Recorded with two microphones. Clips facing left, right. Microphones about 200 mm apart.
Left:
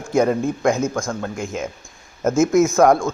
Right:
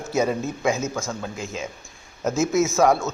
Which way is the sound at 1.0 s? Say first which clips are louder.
Left 5 dB; 5° right (ahead or behind).